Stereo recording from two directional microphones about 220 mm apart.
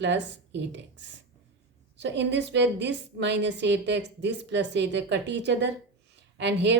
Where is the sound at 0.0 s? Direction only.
55° right (ahead or behind).